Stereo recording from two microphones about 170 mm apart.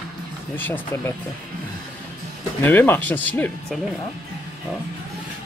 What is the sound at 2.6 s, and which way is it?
Speech, 10° left (ahead or behind).